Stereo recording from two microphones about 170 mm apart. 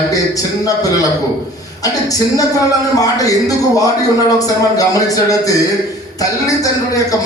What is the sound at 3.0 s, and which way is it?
A man's voice, 20° left (ahead or behind).